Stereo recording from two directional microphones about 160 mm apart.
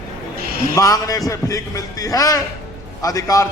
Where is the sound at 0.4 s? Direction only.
70° right (ahead or behind).